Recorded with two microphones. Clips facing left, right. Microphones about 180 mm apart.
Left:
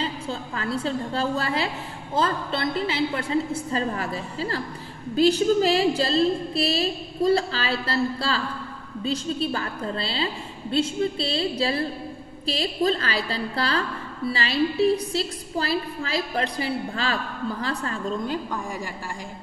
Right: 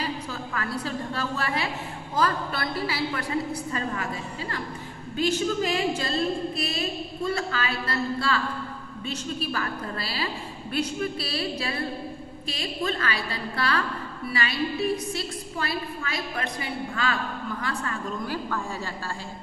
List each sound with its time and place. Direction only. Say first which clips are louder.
0.0 s a woman's voice: left 2 dB; 25° left (ahead or behind)
18.2 s a woman's voice: left 2 dB; 20° left (ahead or behind)